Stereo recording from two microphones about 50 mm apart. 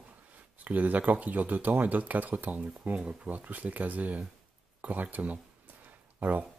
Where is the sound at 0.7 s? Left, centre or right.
Right.